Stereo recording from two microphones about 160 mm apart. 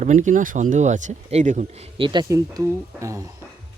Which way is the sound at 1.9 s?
30° right (ahead or behind).